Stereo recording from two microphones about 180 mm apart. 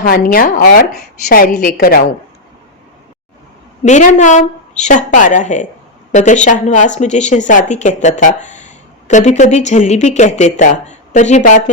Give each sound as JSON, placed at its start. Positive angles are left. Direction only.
{"t": 0.0, "sound": "a woman's voice", "side_deg": 50}
{"t": 3.8, "sound": "a woman's voice", "side_deg": 40}